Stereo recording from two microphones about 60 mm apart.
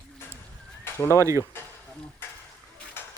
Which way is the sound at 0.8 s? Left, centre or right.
Left.